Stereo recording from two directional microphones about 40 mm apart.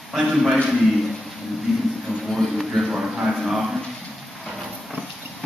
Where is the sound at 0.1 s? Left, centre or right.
Centre.